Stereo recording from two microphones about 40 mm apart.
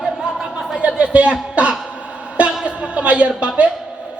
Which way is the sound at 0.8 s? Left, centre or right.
Right.